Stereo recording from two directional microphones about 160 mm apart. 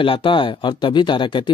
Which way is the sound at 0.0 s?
35° left (ahead or behind).